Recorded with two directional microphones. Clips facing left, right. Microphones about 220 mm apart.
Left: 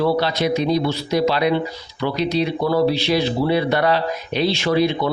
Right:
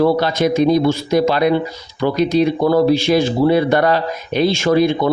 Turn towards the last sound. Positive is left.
turn(degrees=-45)  # may be behind; listen again after turning